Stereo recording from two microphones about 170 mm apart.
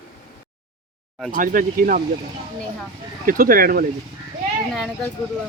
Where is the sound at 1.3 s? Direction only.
55° right (ahead or behind).